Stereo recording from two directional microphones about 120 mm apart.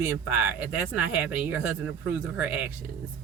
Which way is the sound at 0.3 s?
15° right (ahead or behind).